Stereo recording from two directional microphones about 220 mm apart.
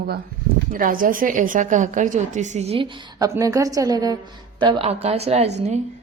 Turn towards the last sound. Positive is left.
turn(degrees=-30)  # may be behind; listen again after turning